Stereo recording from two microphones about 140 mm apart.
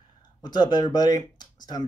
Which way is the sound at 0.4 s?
30° left (ahead or behind).